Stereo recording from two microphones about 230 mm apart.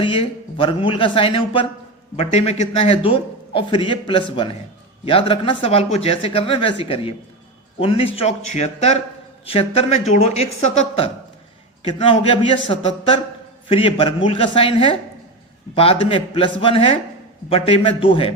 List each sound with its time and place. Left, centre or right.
0.0 s a man's voice: left